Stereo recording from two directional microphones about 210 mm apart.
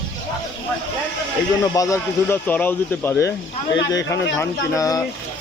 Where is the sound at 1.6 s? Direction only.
15° left (ahead or behind).